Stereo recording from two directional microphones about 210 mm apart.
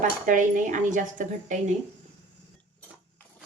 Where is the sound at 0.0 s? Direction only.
35° right (ahead or behind).